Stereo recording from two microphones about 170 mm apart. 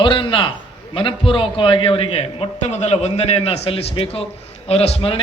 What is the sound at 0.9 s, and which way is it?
A man's voice, 30° left (ahead or behind).